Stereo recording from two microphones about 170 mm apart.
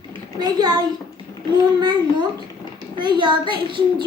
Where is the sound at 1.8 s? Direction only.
25° right (ahead or behind).